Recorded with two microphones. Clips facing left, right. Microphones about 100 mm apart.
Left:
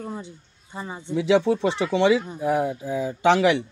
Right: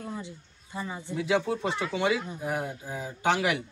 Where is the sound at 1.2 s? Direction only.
85° left.